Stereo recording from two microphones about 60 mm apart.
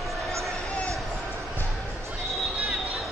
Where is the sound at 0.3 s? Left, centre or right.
Right.